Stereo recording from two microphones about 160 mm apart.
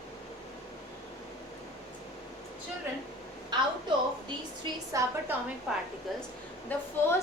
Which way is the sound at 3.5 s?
25° right (ahead or behind).